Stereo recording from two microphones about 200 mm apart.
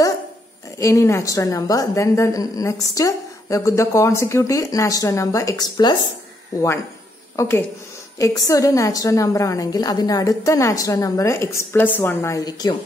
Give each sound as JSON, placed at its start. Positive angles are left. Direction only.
{"t": 0.7, "sound": "a woman's voice", "side_deg": 15}
{"t": 7.3, "sound": "a woman's voice", "side_deg": 15}